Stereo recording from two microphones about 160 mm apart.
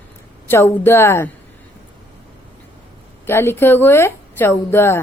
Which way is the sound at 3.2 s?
15° left (ahead or behind).